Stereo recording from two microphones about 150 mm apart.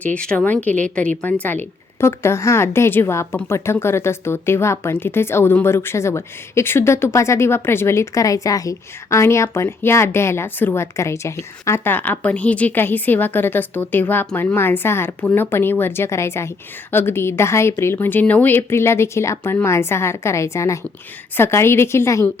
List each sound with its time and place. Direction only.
0.0 s a woman's voice: 5° left (ahead or behind)